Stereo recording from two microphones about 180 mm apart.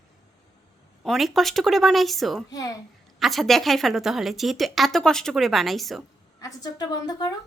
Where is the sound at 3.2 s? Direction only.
Centre (ahead or behind).